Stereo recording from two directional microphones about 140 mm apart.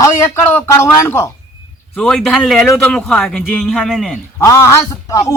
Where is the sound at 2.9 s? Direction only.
5° left (ahead or behind).